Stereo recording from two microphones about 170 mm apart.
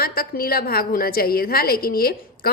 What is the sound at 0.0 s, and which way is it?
A woman's voice, 60° left (ahead or behind).